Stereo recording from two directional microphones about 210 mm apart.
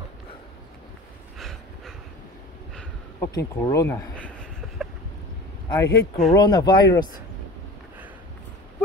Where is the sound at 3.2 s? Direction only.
15° left (ahead or behind).